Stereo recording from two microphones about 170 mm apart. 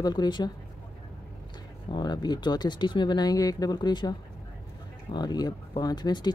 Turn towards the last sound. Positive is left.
turn(degrees=25)  # may be behind; listen again after turning